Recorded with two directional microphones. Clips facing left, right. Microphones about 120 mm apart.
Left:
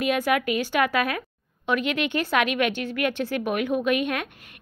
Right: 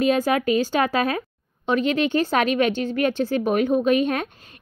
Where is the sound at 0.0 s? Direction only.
30° right (ahead or behind).